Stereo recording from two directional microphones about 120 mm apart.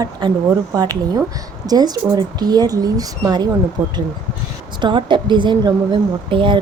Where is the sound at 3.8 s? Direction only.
15° right (ahead or behind).